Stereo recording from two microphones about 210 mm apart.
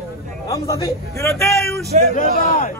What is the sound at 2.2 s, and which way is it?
Speech, 40° left (ahead or behind).